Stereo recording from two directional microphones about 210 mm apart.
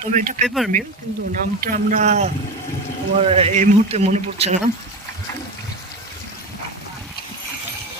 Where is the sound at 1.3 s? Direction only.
40° right (ahead or behind).